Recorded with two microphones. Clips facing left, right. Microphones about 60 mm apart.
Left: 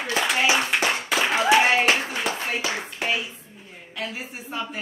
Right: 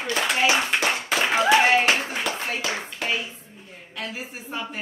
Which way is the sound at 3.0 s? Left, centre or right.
Centre.